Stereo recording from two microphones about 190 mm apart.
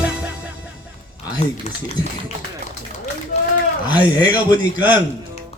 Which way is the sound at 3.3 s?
35° left (ahead or behind).